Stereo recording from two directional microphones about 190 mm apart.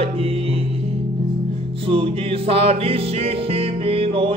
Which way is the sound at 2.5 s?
30° right (ahead or behind).